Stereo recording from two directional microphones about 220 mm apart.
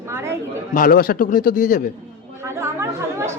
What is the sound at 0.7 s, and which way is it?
A man's voice, 40° left (ahead or behind).